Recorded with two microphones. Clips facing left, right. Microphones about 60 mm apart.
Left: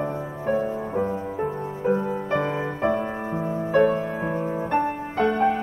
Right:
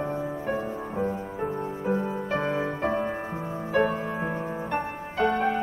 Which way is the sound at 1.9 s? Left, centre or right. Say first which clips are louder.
Left 4 dB; left.